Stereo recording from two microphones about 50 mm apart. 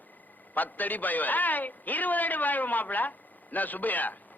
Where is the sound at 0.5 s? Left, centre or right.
Left.